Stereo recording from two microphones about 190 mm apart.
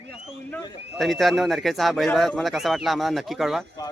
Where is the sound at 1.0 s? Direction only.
Centre (ahead or behind).